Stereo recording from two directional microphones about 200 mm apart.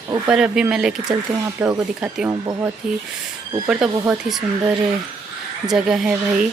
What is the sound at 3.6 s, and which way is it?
Speech, 5° right (ahead or behind).